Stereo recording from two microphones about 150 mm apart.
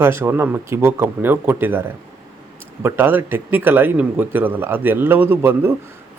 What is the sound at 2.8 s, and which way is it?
Speech, 15° right (ahead or behind).